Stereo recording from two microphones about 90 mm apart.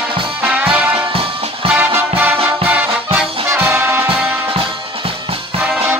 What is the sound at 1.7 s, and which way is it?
Music, 25° right (ahead or behind).